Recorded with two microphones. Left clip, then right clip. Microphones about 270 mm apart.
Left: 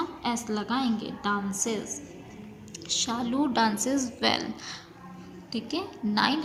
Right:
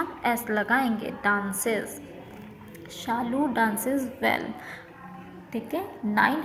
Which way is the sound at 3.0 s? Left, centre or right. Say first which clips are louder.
Right 4 dB; left.